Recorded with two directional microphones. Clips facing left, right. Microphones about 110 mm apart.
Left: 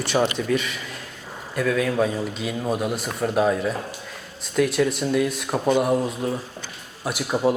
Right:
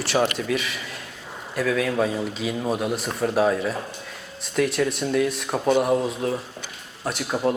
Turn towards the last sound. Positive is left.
turn(degrees=10)  # may be behind; listen again after turning